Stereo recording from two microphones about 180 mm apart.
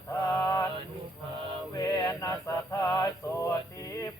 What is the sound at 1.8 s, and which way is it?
Music, 20° left (ahead or behind).